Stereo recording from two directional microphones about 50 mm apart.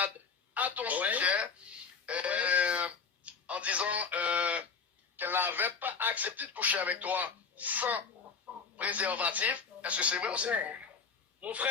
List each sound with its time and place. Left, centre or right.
0.5 s speech: right
5.1 s a man's voice: right